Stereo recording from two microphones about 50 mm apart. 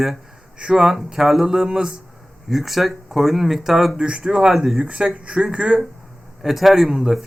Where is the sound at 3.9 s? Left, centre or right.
Centre.